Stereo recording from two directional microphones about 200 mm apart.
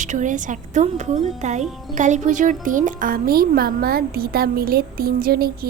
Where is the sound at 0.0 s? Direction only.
40° right (ahead or behind).